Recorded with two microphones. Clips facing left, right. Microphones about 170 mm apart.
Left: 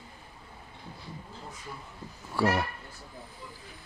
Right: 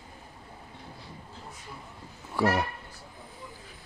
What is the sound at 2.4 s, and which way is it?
Speech, 20° right (ahead or behind).